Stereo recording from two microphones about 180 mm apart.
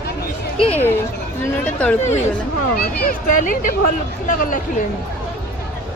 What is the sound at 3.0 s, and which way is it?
Speech, 50° left (ahead or behind).